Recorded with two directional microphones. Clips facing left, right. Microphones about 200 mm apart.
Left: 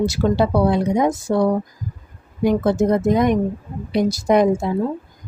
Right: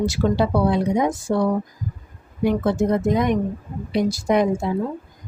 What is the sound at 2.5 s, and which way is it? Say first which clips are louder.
A woman's voice: left 3 dB; 40° left (ahead or behind).